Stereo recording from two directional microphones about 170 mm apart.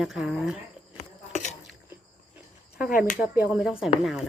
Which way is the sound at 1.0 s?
45° left (ahead or behind).